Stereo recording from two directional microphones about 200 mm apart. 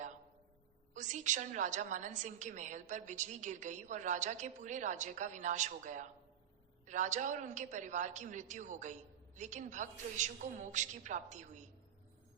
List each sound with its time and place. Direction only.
0.9 s a woman's voice: 40° right (ahead or behind)